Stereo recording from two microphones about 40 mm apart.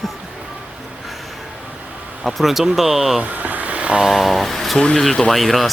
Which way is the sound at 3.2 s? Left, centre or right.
Right.